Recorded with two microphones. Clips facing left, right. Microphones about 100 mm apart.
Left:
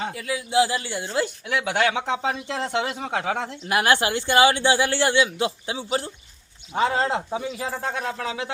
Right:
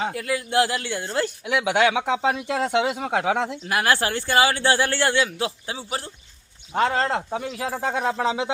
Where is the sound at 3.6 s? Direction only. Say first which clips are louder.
Left 3 dB; 25° left (ahead or behind).